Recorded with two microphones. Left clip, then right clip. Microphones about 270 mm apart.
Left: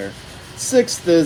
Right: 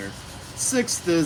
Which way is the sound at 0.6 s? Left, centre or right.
Left.